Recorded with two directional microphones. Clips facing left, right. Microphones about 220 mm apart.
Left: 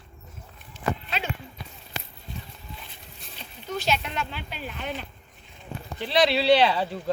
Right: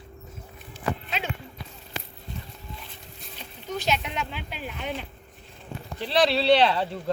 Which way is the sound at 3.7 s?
15° right (ahead or behind).